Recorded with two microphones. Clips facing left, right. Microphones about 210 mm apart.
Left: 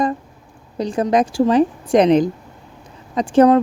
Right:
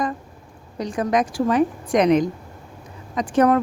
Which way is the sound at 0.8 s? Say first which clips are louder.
Left 4 dB; 30° left (ahead or behind).